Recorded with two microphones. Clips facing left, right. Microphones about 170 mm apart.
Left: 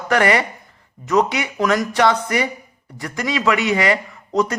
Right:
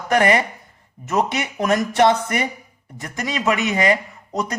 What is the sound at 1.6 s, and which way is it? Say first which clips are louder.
Speech: right 1 dB; 25° right (ahead or behind).